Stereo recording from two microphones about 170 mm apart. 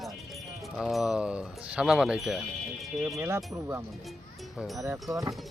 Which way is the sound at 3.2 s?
15° right (ahead or behind).